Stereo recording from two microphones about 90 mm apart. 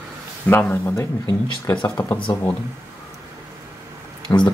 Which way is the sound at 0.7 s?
35° left (ahead or behind).